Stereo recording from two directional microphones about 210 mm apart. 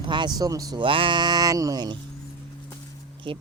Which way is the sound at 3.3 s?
25° right (ahead or behind).